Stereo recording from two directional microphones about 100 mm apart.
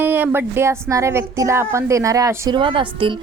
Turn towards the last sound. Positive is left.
turn(degrees=-60)  # may be behind; listen again after turning